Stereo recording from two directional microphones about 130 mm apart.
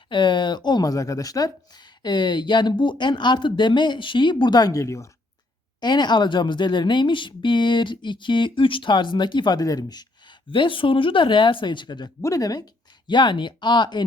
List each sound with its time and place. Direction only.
0.1 s speech: 35° left (ahead or behind)
5.8 s speech: 35° left (ahead or behind)
10.5 s speech: 40° left (ahead or behind)